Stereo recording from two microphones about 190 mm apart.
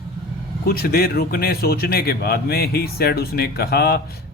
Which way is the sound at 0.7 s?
55° left (ahead or behind).